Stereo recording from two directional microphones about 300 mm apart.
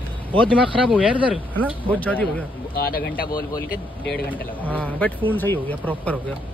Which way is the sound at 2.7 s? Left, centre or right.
Left.